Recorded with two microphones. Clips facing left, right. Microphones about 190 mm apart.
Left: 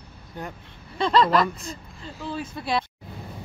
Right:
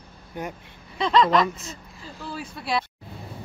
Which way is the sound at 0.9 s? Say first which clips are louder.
Even; centre (ahead or behind).